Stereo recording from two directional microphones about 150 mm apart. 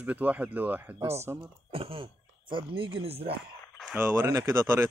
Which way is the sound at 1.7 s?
35° right (ahead or behind).